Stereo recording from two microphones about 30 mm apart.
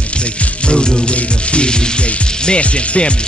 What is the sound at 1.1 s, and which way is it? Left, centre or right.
Speech, left.